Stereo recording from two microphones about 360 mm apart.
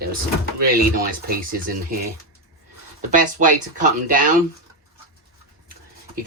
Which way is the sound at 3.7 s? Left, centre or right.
Right.